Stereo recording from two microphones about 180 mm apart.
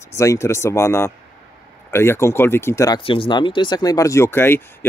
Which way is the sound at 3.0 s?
30° left (ahead or behind).